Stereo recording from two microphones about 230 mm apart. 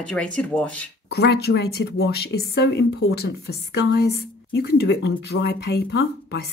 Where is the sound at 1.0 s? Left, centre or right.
Left.